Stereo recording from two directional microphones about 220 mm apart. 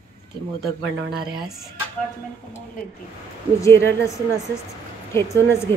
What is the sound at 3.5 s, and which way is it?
Speech, 15° left (ahead or behind).